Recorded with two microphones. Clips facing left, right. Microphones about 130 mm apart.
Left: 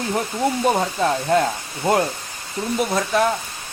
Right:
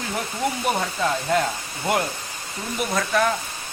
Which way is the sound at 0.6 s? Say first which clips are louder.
Left 5 dB; 30° left (ahead or behind).